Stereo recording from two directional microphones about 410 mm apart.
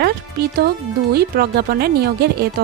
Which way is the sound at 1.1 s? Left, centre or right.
Right.